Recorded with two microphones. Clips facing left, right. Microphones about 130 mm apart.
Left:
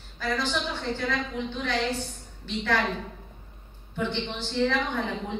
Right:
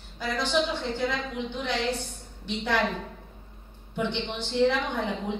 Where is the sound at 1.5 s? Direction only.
15° right (ahead or behind).